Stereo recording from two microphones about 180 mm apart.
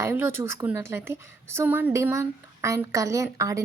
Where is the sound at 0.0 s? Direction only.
15° right (ahead or behind).